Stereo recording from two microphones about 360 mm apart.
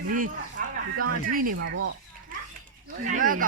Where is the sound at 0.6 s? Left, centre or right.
Right.